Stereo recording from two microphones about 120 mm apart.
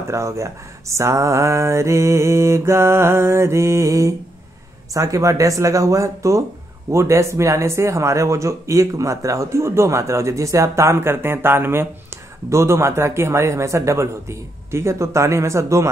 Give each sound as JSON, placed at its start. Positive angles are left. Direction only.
{"t": 0.1, "sound": "speech", "side_deg": -25}